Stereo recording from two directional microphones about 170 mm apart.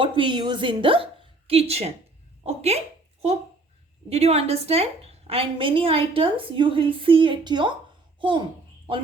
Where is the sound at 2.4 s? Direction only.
35° right (ahead or behind).